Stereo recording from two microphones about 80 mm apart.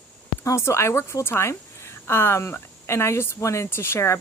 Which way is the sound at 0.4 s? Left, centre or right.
Left.